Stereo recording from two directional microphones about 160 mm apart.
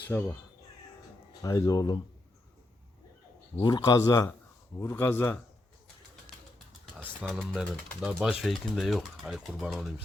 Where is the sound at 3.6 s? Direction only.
25° left (ahead or behind).